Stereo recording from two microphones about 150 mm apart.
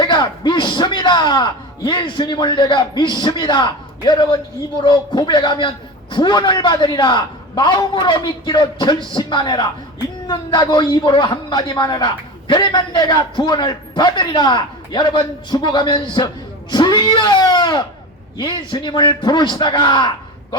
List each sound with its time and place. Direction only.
0.0 s speech: 30° left (ahead or behind)